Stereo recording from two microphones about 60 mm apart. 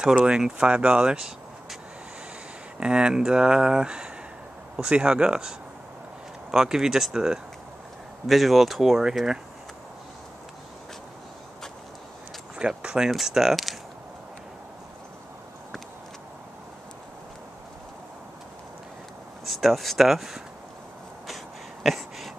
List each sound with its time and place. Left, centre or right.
0.0 s speech: centre
2.8 s speech: centre
12.5 s speech: centre
19.4 s speech: centre
21.8 s a sound: centre